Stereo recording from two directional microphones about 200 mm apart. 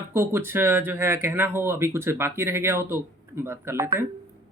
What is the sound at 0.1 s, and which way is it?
Speech, 10° right (ahead or behind).